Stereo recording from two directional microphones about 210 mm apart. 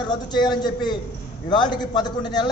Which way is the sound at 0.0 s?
20° left (ahead or behind).